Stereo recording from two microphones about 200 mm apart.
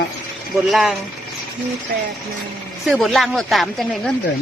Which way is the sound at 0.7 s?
Centre (ahead or behind).